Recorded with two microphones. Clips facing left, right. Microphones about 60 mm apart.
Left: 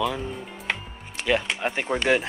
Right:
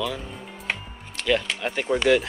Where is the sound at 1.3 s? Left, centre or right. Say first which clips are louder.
Even; left.